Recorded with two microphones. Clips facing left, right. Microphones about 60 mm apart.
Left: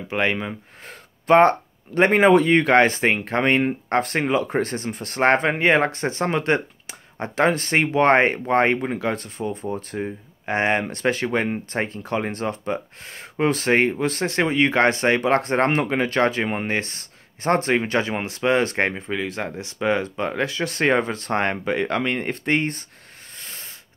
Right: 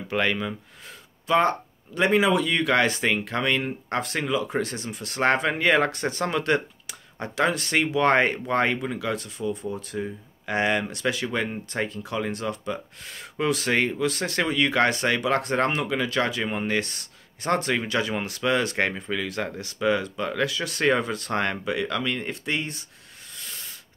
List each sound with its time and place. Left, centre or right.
0.1 s speech: left
0.8 s speech: left
23.3 s a sound: left